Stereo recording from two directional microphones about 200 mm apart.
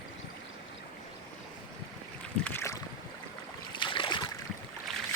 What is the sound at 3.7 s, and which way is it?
Boat, 25° left (ahead or behind).